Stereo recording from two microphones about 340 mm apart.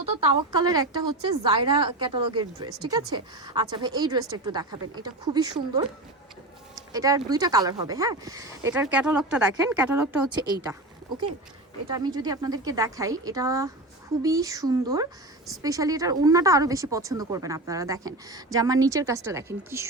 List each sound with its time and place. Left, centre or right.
0.2 s speech: centre
2.6 s speech: right
3.4 s speech: centre
6.9 s speech: centre
11.9 s speech: centre